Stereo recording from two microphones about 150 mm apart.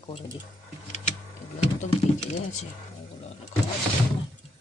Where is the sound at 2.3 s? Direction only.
50° left (ahead or behind).